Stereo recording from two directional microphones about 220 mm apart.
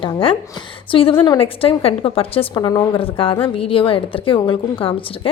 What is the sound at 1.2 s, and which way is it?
A woman's voice, 25° left (ahead or behind).